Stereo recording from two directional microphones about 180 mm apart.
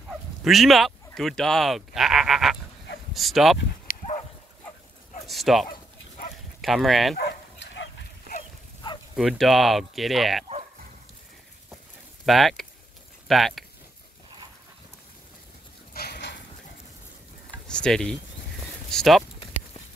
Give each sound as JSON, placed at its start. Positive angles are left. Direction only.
{"t": 0.1, "sound": "speech", "side_deg": 0}
{"t": 3.8, "sound": "dog", "side_deg": 55}
{"t": 5.2, "sound": "bow-wow", "side_deg": 0}
{"t": 6.6, "sound": "speech", "side_deg": 0}
{"t": 7.2, "sound": "dog", "side_deg": 70}
{"t": 9.1, "sound": "speech", "side_deg": -5}
{"t": 12.3, "sound": "speech", "side_deg": 0}
{"t": 15.9, "sound": "a sound", "side_deg": 60}
{"t": 17.6, "sound": "a sound", "side_deg": 5}
{"t": 18.9, "sound": "speech", "side_deg": 0}